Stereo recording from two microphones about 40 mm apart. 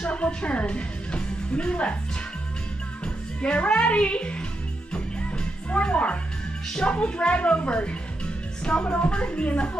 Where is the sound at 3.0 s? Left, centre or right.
Left.